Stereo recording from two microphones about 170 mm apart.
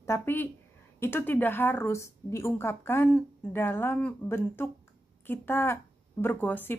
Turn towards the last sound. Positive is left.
turn(degrees=10)  # may be behind; listen again after turning